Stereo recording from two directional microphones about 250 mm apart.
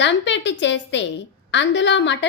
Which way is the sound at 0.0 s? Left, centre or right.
Left.